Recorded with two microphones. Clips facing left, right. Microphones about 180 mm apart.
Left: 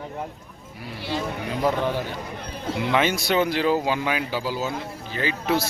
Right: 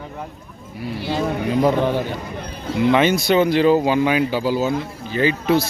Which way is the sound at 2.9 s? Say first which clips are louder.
Right 5 dB; 5° left (ahead or behind).